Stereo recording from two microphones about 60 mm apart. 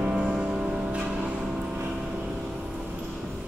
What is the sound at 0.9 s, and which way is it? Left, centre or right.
Vehicle, right.